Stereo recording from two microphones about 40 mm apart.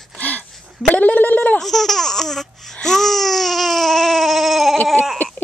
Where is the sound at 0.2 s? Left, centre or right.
Left.